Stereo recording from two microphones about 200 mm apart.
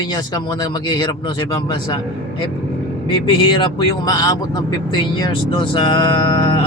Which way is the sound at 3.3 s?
25° left (ahead or behind).